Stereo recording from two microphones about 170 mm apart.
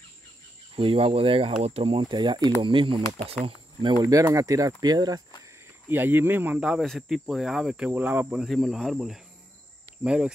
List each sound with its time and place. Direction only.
0.7 s speech: 35° right (ahead or behind)
5.9 s speech: 10° right (ahead or behind)